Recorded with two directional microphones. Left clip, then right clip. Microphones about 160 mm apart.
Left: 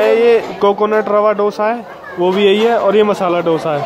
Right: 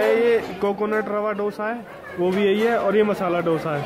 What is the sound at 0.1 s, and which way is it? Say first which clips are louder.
Speech: left 8 dB; 10° left (ahead or behind).